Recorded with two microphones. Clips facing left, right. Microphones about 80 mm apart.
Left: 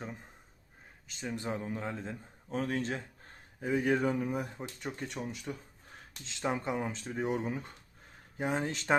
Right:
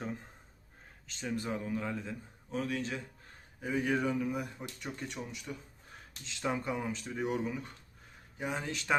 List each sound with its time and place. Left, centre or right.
1.3 s speech: left
2.5 s a man's voice: left
6.2 s a man's voice: left